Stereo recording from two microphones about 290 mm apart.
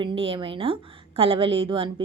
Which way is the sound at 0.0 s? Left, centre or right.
Centre.